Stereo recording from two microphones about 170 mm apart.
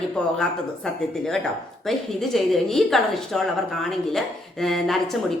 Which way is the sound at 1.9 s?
Centre (ahead or behind).